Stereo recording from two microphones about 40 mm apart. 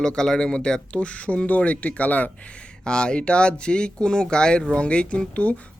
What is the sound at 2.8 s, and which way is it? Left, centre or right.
A man's voice, left.